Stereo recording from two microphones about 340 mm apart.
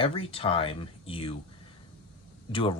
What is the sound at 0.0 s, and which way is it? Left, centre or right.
Speech, centre.